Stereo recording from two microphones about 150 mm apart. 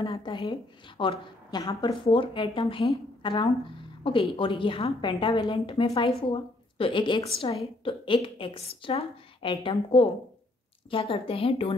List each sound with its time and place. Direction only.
0.0 s a woman's voice: 35° left (ahead or behind)
1.9 s a woman's voice: 40° left (ahead or behind)